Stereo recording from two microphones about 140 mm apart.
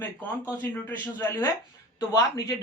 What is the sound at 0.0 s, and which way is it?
Speech, 10° left (ahead or behind).